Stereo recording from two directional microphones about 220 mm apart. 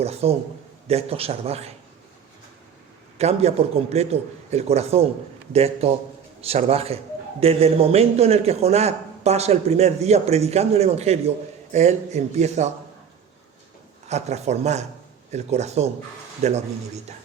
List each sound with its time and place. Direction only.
0.0 s a man's voice: 30° right (ahead or behind)
3.2 s a man's voice: 30° right (ahead or behind)
14.1 s speech: 30° right (ahead or behind)